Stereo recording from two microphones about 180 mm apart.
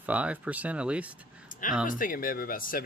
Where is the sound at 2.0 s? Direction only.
50° left (ahead or behind).